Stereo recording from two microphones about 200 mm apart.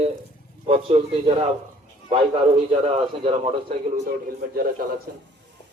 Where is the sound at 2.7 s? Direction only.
30° right (ahead or behind).